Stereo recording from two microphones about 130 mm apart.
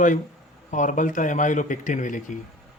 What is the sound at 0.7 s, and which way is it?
Speech, 75° left (ahead or behind).